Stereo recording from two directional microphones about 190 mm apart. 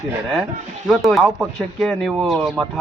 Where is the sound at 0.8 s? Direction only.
Centre (ahead or behind).